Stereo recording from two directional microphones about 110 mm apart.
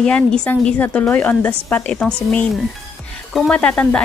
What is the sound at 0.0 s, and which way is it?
A woman's voice, 5° left (ahead or behind).